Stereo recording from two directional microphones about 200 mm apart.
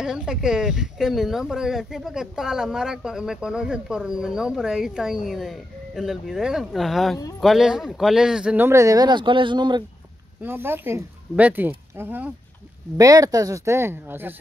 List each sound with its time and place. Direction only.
0.0 s speech: 5° right (ahead or behind); by 9.8 s 20° right (ahead or behind)
10.4 s speech: 10° right (ahead or behind)